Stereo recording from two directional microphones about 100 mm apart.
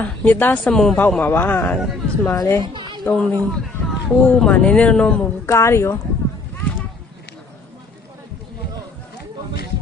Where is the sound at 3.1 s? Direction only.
10° left (ahead or behind).